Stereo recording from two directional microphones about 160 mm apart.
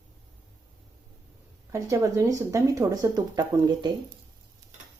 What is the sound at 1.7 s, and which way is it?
Speech, 20° right (ahead or behind).